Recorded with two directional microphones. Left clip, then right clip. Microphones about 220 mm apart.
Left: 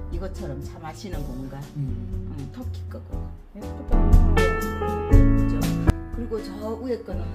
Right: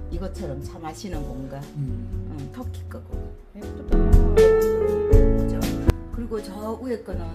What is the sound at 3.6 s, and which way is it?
Music, centre (ahead or behind).